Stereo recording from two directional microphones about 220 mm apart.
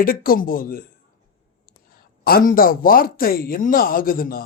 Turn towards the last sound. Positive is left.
turn(degrees=40)  # may be behind; listen again after turning